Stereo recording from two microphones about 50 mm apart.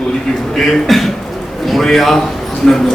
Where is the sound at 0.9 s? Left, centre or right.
Centre.